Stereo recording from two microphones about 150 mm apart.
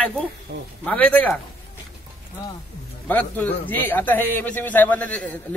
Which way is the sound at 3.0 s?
10° left (ahead or behind).